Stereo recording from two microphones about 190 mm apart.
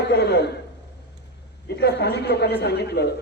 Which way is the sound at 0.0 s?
60° left (ahead or behind).